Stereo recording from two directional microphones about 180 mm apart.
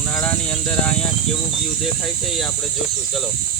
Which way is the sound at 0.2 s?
10° left (ahead or behind).